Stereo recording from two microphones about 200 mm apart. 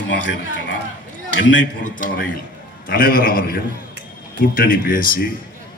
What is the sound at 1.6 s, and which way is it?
A man's voice, 40° left (ahead or behind).